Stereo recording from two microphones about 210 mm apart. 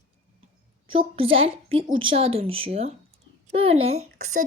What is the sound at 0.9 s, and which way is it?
Speech, 25° right (ahead or behind).